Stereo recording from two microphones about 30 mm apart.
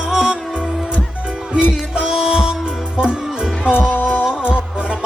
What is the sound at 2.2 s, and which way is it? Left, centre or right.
Music, right.